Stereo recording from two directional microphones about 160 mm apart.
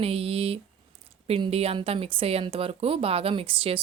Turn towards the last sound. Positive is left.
turn(degrees=-35)  # may be behind; listen again after turning